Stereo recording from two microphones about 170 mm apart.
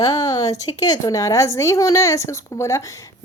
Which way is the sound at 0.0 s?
20° left (ahead or behind).